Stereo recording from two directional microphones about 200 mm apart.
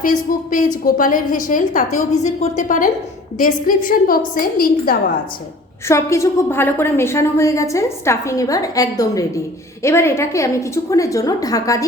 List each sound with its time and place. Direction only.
0.0 s a woman's voice: 45° left (ahead or behind)
5.9 s a woman's voice: 15° left (ahead or behind)